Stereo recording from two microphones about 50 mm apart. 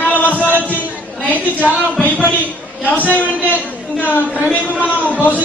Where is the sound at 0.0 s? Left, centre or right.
Left.